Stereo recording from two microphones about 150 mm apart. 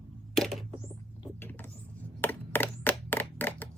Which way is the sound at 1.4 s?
15° left (ahead or behind).